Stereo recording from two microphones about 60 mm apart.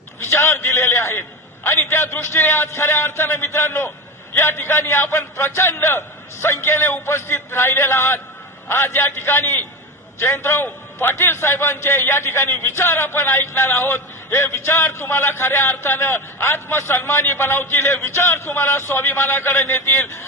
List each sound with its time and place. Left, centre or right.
0.2 s a man's voice: left